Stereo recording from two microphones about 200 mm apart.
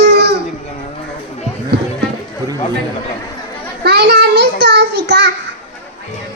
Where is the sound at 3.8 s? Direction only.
55° right (ahead or behind).